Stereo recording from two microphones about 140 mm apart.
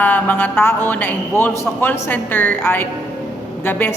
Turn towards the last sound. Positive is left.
turn(degrees=15)  # may be behind; listen again after turning